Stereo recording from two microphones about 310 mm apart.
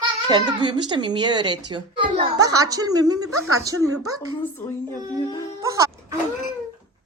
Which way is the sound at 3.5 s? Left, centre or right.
Centre.